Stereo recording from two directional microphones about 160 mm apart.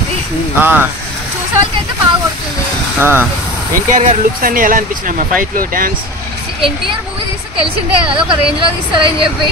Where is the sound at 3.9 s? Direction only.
50° right (ahead or behind).